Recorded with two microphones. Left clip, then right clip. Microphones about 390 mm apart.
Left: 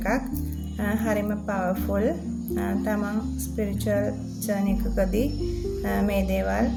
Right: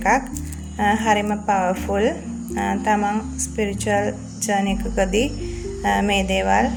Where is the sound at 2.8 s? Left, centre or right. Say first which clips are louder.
Right 8 dB; left.